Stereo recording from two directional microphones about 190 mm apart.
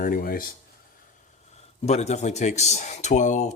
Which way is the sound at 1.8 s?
35° left (ahead or behind).